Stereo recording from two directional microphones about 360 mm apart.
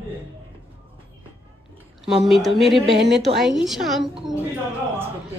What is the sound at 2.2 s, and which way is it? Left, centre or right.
Speech, centre.